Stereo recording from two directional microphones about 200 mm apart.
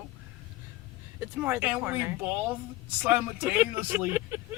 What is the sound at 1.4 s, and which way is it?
Speech, 10° right (ahead or behind).